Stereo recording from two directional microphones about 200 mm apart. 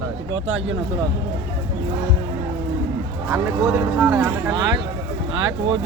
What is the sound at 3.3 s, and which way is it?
Speech, 15° right (ahead or behind).